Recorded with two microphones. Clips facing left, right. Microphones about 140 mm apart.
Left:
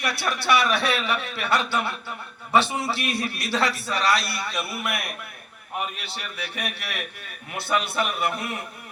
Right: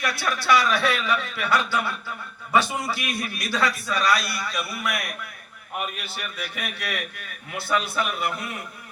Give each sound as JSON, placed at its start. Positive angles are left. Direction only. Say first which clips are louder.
{"t": 0.0, "sound": "a man's voice", "louder": "even", "side_deg": 25}
{"t": 6.1, "sound": "a man's voice", "louder": "even", "side_deg": 25}